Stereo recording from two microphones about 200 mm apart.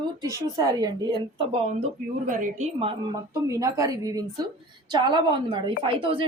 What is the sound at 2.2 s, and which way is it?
Speech, 40° right (ahead or behind).